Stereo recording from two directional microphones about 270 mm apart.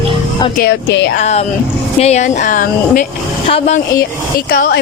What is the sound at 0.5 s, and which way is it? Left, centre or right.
Speech, left.